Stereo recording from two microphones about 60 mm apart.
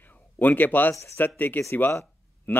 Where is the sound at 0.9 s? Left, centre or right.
Left.